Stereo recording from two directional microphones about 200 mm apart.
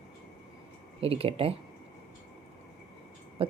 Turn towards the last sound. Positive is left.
turn(degrees=-25)  # may be behind; listen again after turning